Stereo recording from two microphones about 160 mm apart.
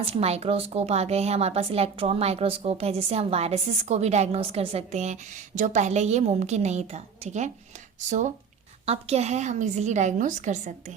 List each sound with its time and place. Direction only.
0.0 s a woman's voice: 40° right (ahead or behind)
8.9 s a woman's voice: 40° right (ahead or behind)